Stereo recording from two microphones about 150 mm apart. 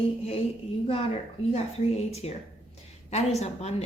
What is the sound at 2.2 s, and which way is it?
Speech, 45° left (ahead or behind).